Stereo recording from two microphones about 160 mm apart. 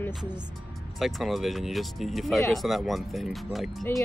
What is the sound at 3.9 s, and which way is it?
Speech, 15° left (ahead or behind).